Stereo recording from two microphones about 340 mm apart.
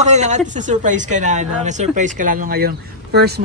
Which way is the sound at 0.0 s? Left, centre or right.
Centre.